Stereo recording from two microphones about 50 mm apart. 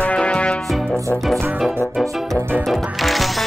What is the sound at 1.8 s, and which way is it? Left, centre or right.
Music, centre.